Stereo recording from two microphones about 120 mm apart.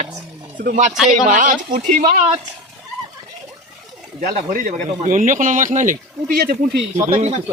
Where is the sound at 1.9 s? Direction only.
65° right (ahead or behind).